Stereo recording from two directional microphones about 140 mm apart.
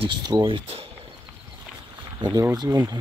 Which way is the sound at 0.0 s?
30° right (ahead or behind).